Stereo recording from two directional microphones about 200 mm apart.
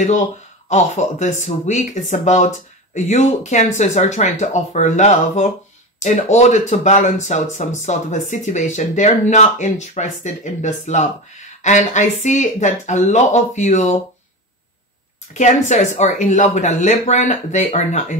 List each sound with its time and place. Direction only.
0.0 s speech: 35° left (ahead or behind)
15.3 s speech: 35° left (ahead or behind)